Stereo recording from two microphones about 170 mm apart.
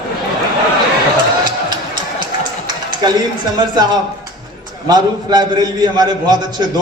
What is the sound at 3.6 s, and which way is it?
A man's voice, 25° right (ahead or behind).